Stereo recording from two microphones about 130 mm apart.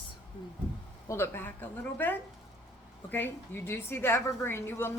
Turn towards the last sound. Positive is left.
turn(degrees=20)  # may be behind; listen again after turning